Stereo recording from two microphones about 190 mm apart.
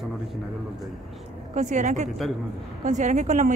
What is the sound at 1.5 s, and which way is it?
A woman's voice, 40° right (ahead or behind).